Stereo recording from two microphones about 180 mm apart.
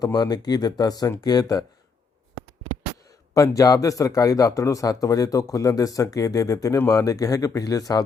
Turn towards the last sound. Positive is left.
turn(degrees=20)  # may be behind; listen again after turning